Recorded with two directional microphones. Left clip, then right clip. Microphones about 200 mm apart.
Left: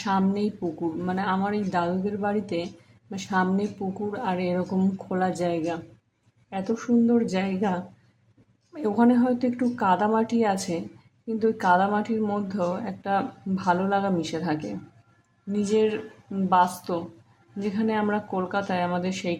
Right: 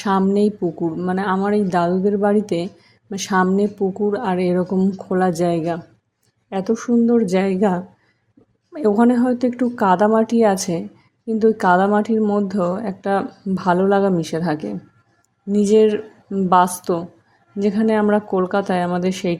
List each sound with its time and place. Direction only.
0.0 s a woman's voice: 35° right (ahead or behind)